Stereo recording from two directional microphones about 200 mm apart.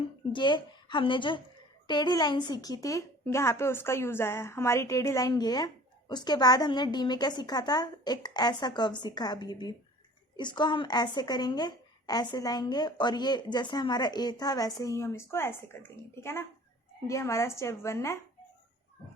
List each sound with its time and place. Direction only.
0.3 s a woman's voice: 25° left (ahead or behind)